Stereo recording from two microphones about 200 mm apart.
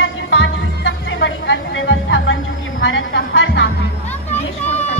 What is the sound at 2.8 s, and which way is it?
Speech, 65° left (ahead or behind).